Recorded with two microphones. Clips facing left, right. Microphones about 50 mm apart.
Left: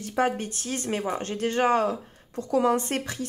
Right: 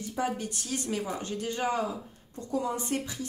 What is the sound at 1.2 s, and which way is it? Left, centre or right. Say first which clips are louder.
Speech: left 7 dB; left.